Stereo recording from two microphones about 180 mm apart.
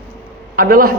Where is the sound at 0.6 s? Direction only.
55° right (ahead or behind).